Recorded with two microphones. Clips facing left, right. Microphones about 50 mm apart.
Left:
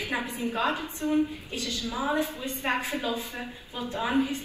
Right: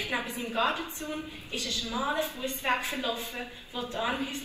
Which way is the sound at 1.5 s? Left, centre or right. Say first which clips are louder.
Left 1 dB; right.